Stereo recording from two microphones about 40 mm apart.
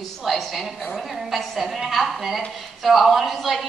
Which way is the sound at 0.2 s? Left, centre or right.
Centre.